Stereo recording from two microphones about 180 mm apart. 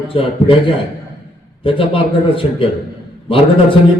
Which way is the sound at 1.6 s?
30° left (ahead or behind).